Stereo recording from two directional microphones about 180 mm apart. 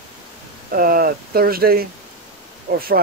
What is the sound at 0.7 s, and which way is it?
Speech, 55° right (ahead or behind).